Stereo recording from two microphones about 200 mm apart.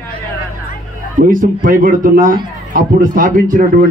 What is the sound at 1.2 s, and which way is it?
A man's voice, 45° right (ahead or behind).